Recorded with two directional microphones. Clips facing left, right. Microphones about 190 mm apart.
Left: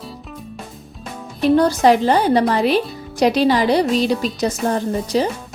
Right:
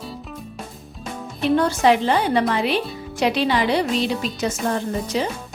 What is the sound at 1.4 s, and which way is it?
Speech, 40° left (ahead or behind).